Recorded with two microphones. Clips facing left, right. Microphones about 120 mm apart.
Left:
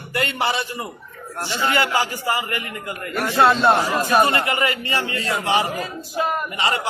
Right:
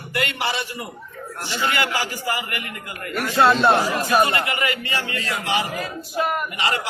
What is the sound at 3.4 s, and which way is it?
Speech, centre (ahead or behind).